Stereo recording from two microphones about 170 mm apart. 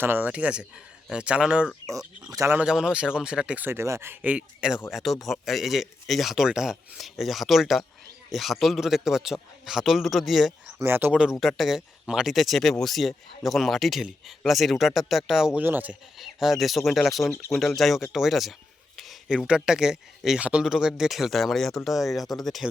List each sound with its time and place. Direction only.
0.0 s speech: 10° right (ahead or behind)
2.3 s speech: 20° right (ahead or behind)
2.6 s speech: 5° right (ahead or behind)
10.8 s speech: 15° right (ahead or behind)